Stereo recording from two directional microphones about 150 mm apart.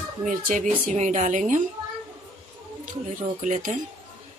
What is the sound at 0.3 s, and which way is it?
Speech, 65° right (ahead or behind).